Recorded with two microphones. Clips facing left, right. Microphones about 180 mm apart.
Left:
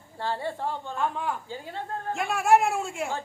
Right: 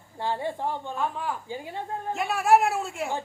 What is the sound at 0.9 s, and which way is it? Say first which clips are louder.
Speech: left 1 dB; centre (ahead or behind).